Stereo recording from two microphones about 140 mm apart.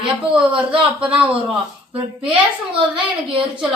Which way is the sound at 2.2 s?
40° right (ahead or behind).